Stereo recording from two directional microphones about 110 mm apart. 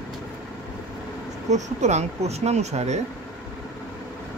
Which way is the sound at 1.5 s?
90° right.